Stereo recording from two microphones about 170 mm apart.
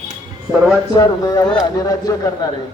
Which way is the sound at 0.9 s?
20° left (ahead or behind).